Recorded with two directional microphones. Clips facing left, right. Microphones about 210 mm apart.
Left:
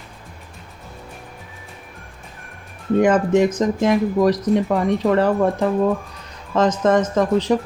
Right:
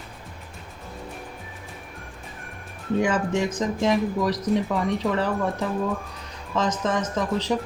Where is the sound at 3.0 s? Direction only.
60° left (ahead or behind).